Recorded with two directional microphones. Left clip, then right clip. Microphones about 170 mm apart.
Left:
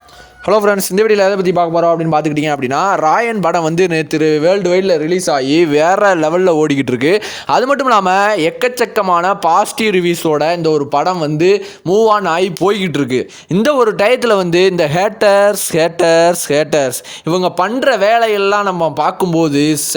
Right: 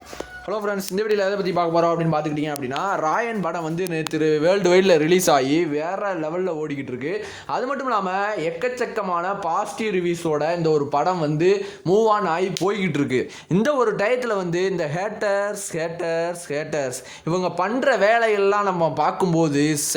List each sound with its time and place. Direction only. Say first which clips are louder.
0.4 s speech: left 14 dB; 60° left (ahead or behind); by 4.6 s 40° left (ahead or behind)
4.6 s speech: left 4 dB; 15° left (ahead or behind)
5.6 s speech: left 14 dB; 60° left (ahead or behind); by 12.1 s 40° left (ahead or behind)
12.1 s speech: left 8 dB; 55° left (ahead or behind)
12.6 s speech: left 8 dB; 45° left (ahead or behind)